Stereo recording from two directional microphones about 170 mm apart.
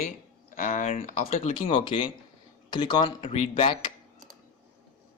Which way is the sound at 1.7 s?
30° left (ahead or behind).